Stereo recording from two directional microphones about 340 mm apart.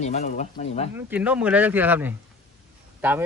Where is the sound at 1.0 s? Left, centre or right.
Centre.